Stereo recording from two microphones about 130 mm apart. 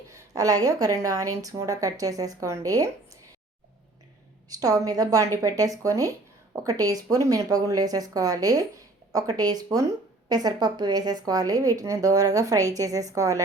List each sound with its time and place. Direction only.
0.1 s speech: 25° right (ahead or behind)
4.4 s speech: 30° right (ahead or behind)